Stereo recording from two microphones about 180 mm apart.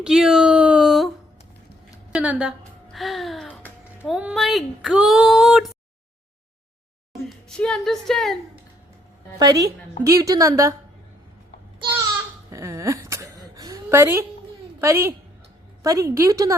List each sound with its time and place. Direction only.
0.0 s a sound: 5° right (ahead or behind)
2.1 s speech: 5° right (ahead or behind)
7.1 s a woman's voice: centre (ahead or behind)
9.4 s a woman's voice: 20° right (ahead or behind)
12.5 s a sound: 15° right (ahead or behind)
14.8 s a woman's voice: 15° right (ahead or behind)